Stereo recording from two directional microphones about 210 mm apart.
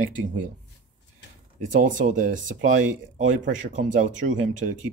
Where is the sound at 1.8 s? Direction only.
35° right (ahead or behind).